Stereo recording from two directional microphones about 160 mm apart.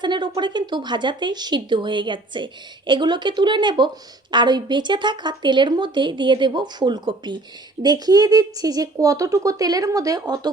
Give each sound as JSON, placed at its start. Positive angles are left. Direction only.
{"t": 0.0, "sound": "speech", "side_deg": -30}